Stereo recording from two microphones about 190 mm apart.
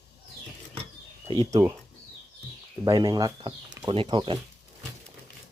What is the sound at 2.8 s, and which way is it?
Speech, 20° right (ahead or behind).